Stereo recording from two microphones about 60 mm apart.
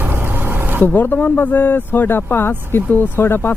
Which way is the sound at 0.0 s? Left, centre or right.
Right.